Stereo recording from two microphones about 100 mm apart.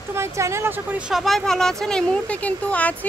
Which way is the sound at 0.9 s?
10° right (ahead or behind).